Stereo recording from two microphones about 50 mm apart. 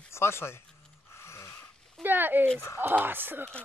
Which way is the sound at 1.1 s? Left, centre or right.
Left.